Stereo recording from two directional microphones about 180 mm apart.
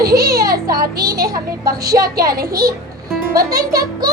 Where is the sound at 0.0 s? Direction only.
60° right (ahead or behind).